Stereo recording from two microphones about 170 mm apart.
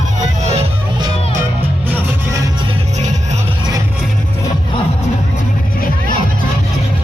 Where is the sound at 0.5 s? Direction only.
30° right (ahead or behind).